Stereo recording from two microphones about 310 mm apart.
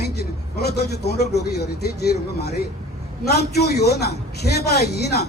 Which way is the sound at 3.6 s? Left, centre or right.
Left.